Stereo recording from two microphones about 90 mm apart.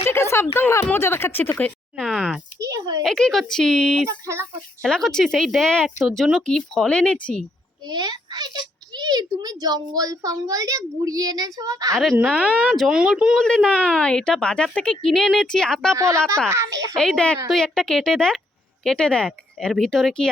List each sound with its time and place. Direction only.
0.0 s a sound: 30° left (ahead or behind)
0.5 s speech: 30° left (ahead or behind)
2.1 s a child's voice: 10° right (ahead or behind)
2.6 s a sound: 40° right (ahead or behind)
3.0 s a woman's voice: 5° left (ahead or behind)
6.4 s a woman's voice: 10° left (ahead or behind)
7.9 s a child's voice: 55° right (ahead or behind)
12.9 s speech: 10° right (ahead or behind)
13.3 s a woman's voice: 5° left (ahead or behind)
16.0 s a child's voice: 35° right (ahead or behind)
16.9 s a woman's voice: 10° left (ahead or behind)